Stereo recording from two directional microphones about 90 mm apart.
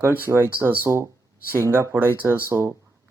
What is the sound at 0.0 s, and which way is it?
Speech, 25° right (ahead or behind).